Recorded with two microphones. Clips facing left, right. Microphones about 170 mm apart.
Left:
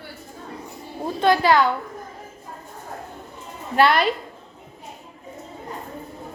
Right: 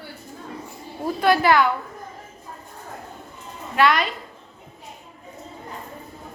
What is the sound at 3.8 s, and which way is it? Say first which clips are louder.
Speech: left 2 dB; 30° left (ahead or behind).